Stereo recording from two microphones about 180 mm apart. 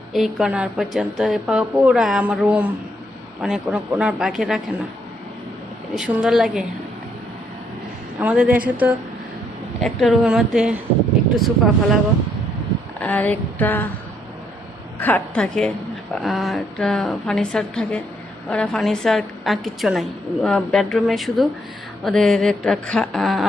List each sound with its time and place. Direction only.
0.1 s a woman's voice: centre (ahead or behind)
6.0 s a woman's voice: 5° right (ahead or behind)
8.2 s a woman's voice: 10° right (ahead or behind)
13.0 s a sound: 10° left (ahead or behind)
15.0 s a woman's voice: 10° left (ahead or behind)